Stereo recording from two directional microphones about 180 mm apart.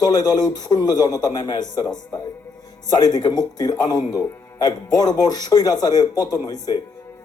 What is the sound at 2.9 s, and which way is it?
Speech, 20° left (ahead or behind).